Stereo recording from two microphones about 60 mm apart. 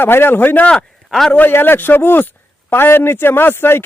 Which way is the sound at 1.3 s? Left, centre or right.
Left.